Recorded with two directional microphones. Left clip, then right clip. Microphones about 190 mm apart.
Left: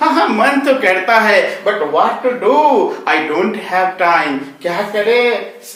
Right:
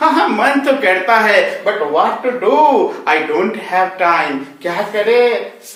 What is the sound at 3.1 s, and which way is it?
Speech, 15° left (ahead or behind).